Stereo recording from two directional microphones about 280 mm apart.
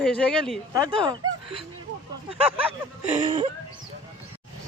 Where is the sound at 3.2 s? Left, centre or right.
Centre.